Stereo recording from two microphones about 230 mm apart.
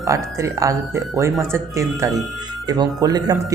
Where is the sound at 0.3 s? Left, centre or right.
Centre.